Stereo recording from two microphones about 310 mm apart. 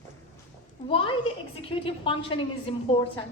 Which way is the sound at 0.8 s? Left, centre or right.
Centre.